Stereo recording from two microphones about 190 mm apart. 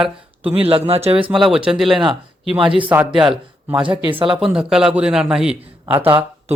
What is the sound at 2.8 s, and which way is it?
Speech, 5° right (ahead or behind).